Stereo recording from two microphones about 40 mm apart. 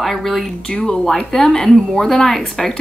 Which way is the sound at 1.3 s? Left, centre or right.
Centre.